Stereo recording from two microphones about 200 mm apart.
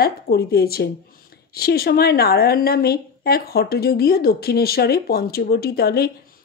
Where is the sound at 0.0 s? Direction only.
50° left (ahead or behind).